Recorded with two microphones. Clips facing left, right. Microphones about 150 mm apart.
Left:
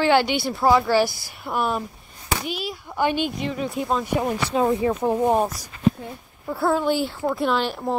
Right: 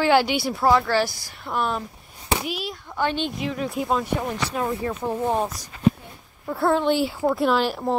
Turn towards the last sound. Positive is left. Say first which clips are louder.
# right 2 dB
turn(degrees=-5)  # may be behind; listen again after turning